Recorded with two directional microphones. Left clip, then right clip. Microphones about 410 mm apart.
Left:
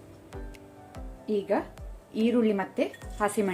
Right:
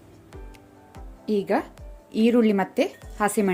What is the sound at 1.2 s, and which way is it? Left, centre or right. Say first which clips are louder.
Speech: right 4 dB; centre.